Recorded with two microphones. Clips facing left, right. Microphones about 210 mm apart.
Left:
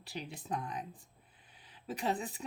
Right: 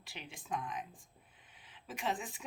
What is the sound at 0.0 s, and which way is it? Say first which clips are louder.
Speech: left 7 dB; 40° left (ahead or behind).